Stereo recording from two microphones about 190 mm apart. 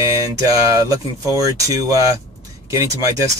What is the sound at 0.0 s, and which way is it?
Speech, 20° right (ahead or behind).